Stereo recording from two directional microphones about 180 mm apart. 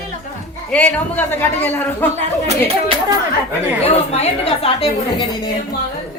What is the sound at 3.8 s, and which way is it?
A woman's voice, 35° left (ahead or behind).